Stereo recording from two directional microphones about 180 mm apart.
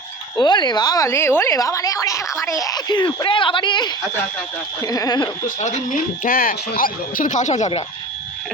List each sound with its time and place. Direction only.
0.3 s a woman's voice: 25° left (ahead or behind)
5.5 s speech: 40° left (ahead or behind)
6.2 s speech: 50° left (ahead or behind)